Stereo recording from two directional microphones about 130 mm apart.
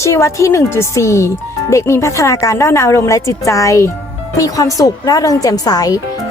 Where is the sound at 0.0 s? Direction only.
20° left (ahead or behind).